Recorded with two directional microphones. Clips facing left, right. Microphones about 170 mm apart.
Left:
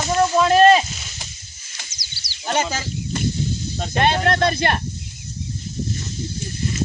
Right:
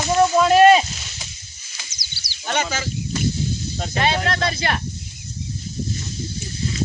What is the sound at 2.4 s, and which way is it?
Speech, 35° left (ahead or behind).